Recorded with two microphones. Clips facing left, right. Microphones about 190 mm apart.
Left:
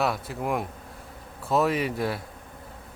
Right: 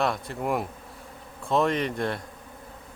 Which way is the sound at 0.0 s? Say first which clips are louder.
Even; 5° left (ahead or behind).